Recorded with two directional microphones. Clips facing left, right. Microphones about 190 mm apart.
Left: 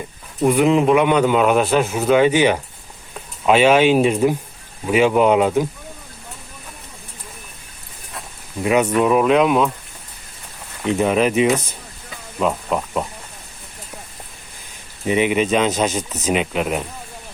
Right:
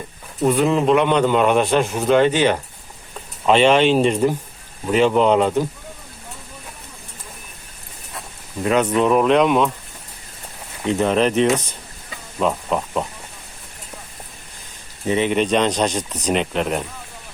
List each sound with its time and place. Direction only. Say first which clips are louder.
0.4 s a man's voice: left 2 dB; 15° left (ahead or behind)
8.6 s a man's voice: left 1 dB; 10° left (ahead or behind)
10.9 s a man's voice: even; 10° left (ahead or behind)
15.0 s speech: left 1 dB; 10° left (ahead or behind)